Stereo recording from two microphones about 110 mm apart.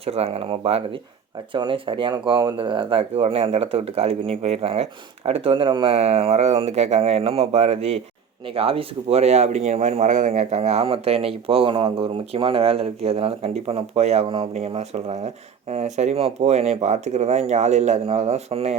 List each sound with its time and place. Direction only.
0.0 s speech: 65° right (ahead or behind)
1.5 s speech: 50° right (ahead or behind)
5.9 s speech: 70° right (ahead or behind)
8.5 s speech: 60° right (ahead or behind); by 18.8 s 80° right